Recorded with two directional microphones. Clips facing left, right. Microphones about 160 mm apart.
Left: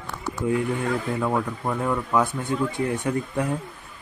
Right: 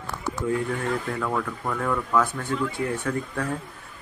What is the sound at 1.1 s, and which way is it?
A man's voice, 20° left (ahead or behind).